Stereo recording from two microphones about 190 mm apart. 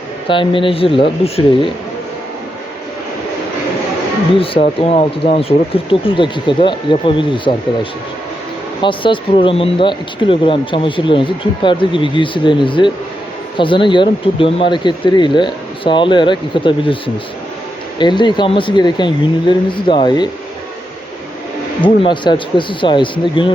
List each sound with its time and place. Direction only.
0.3 s speech: 25° left (ahead or behind)
4.4 s speech: 30° left (ahead or behind)
8.8 s speech: 25° left (ahead or behind)
18.0 s speech: 25° left (ahead or behind)
21.8 s speech: 25° left (ahead or behind)